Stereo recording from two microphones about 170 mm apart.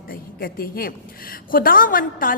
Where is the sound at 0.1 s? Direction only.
60° left (ahead or behind).